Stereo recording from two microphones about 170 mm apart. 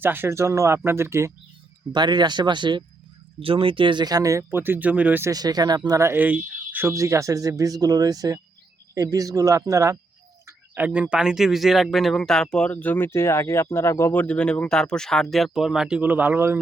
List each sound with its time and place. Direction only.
0.0 s speech: 10° right (ahead or behind)
1.9 s speech: 25° right (ahead or behind); by 5.3 s 10° right (ahead or behind)
5.3 s speech: 25° right (ahead or behind)